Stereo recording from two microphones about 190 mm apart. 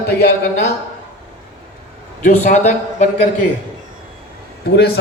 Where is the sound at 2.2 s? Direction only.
40° left (ahead or behind).